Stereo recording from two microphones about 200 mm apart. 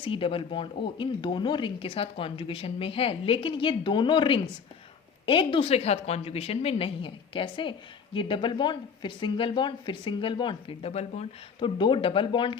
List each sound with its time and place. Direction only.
0.0 s a woman's voice: 25° left (ahead or behind)